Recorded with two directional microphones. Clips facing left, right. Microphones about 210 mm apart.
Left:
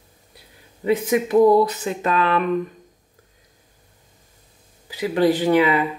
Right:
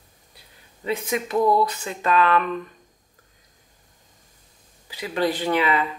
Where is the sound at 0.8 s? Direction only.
15° left (ahead or behind).